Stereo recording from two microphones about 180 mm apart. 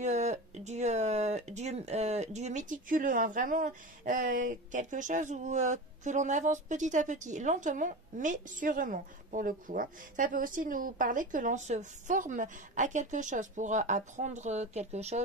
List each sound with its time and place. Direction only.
0.0 s speech: 40° right (ahead or behind)